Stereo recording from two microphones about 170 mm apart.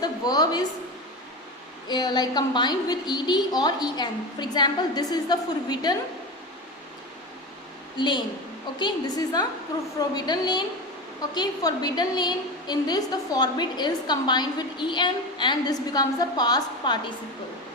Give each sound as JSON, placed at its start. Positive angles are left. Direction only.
{"t": 0.0, "sound": "a sound", "side_deg": 25}
{"t": 1.9, "sound": "a woman's voice", "side_deg": 25}
{"t": 7.9, "sound": "a woman's voice", "side_deg": 25}